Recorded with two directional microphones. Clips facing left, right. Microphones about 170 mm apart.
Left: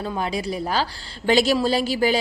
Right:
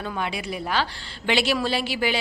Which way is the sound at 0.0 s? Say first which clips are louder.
Left 4 dB; 35° left (ahead or behind).